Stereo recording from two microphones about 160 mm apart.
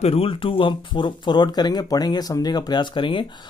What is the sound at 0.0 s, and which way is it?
Speech, 35° left (ahead or behind).